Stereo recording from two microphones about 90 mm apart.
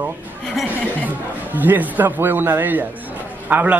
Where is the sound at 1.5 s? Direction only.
20° right (ahead or behind).